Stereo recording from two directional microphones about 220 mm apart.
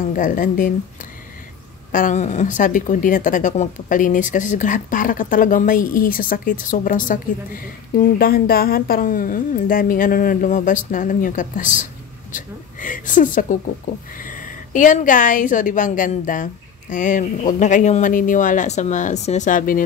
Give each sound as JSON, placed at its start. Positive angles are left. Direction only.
{"t": 0.1, "sound": "speech", "side_deg": 40}
{"t": 1.9, "sound": "a woman's voice", "side_deg": 35}